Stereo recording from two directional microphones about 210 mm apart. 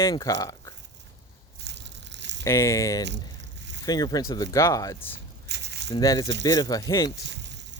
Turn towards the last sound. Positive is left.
turn(degrees=-55)  # may be behind; listen again after turning